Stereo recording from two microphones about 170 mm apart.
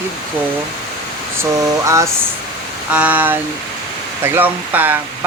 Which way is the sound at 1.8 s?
15° right (ahead or behind).